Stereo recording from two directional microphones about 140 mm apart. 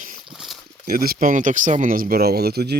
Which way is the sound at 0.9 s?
90° right.